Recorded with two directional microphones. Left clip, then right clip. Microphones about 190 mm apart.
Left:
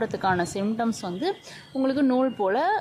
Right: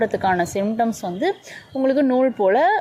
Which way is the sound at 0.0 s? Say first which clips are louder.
Right 5 dB; 10° right (ahead or behind).